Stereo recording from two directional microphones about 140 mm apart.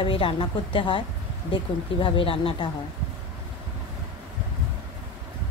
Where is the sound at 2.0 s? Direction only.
40° left (ahead or behind).